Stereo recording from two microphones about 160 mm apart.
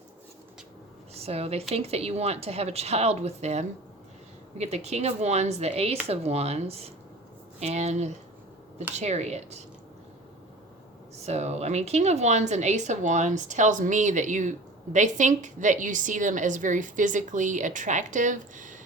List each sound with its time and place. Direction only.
1.1 s a woman's voice: 40° right (ahead or behind)
11.2 s a woman's voice: 40° right (ahead or behind)